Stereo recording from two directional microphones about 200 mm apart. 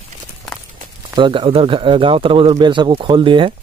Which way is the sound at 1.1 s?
25° right (ahead or behind).